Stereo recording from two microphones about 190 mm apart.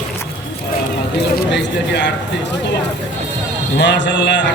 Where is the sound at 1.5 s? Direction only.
65° left (ahead or behind).